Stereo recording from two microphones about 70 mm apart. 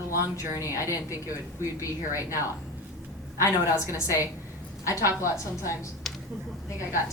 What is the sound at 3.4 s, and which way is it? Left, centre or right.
A woman's voice, left.